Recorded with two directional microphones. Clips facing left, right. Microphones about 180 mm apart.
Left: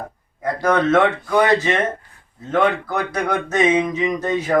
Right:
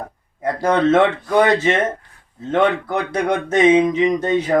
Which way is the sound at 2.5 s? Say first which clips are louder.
Right 1 dB; 25° right (ahead or behind).